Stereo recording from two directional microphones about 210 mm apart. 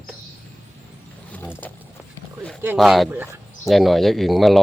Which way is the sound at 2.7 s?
Centre (ahead or behind).